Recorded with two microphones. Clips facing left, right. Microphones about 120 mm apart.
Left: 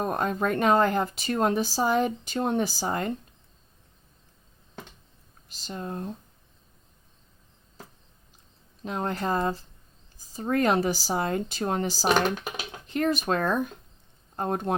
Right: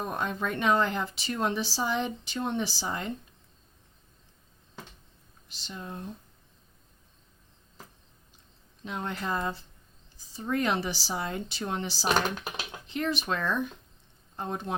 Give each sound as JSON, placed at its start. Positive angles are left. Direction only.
{"t": 0.0, "sound": "speech", "side_deg": 45}
{"t": 5.5, "sound": "speech", "side_deg": 40}
{"t": 8.8, "sound": "speech", "side_deg": 40}